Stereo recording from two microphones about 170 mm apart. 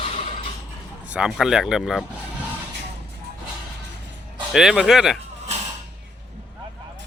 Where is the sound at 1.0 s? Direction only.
5° right (ahead or behind).